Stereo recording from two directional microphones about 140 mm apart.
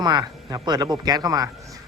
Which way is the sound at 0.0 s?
30° right (ahead or behind).